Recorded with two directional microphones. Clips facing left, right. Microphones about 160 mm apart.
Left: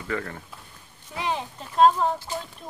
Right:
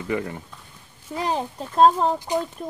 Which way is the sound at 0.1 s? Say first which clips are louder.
Right 4 dB; 15° right (ahead or behind).